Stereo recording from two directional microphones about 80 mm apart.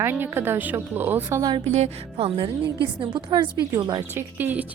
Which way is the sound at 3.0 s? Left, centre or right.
Right.